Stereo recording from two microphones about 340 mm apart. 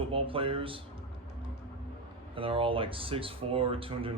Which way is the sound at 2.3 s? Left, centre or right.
Centre.